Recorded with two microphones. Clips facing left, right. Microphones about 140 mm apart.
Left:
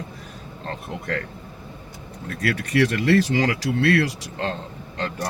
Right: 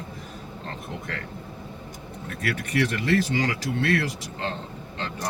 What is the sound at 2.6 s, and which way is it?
Speech, 40° left (ahead or behind).